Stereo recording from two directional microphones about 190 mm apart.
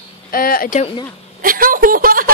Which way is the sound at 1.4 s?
45° right (ahead or behind).